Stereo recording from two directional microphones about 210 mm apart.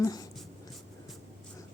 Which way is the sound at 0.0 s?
15° left (ahead or behind).